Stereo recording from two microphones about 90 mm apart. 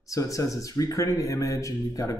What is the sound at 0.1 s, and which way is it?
Speech, 40° left (ahead or behind).